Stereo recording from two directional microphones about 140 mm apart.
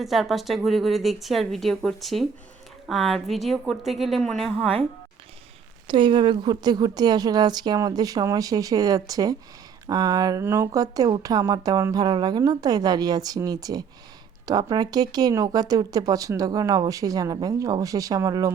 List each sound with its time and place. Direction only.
0.0 s speech: centre (ahead or behind)
5.9 s speech: 35° right (ahead or behind)
10.4 s speech: 15° right (ahead or behind)